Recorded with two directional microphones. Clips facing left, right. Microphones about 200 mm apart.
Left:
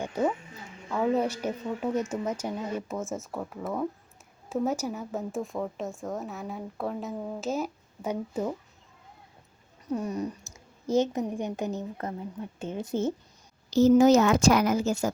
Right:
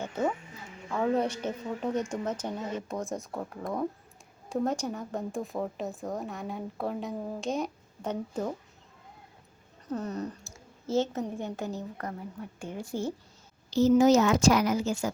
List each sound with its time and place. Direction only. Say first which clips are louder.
0.0 s music: left 2 dB; 10° left (ahead or behind)
0.9 s a woman's voice: left 1 dB; 5° left (ahead or behind)
9.8 s a woman's voice: left 3 dB; 10° left (ahead or behind)
13.7 s a woman's voice: left 2 dB; 45° left (ahead or behind)